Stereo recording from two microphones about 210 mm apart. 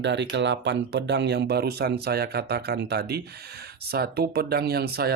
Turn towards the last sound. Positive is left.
turn(degrees=-50)  # may be behind; listen again after turning